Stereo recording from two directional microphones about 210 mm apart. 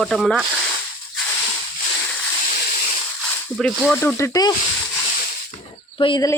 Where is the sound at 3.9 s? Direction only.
10° left (ahead or behind).